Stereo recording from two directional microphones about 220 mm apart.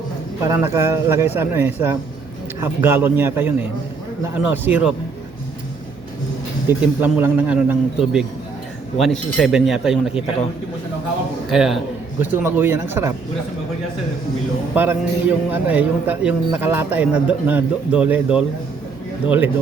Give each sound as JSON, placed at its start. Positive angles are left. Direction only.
{"t": 0.4, "sound": "a man's voice", "side_deg": -15}
{"t": 6.7, "sound": "a man's voice", "side_deg": -10}
{"t": 11.5, "sound": "a man's voice", "side_deg": 0}
{"t": 14.8, "sound": "a man's voice", "side_deg": -10}